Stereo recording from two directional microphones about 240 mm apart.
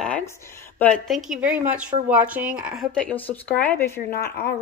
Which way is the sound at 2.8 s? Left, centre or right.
Centre.